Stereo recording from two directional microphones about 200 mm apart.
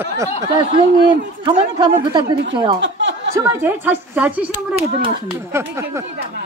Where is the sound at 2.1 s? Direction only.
20° right (ahead or behind).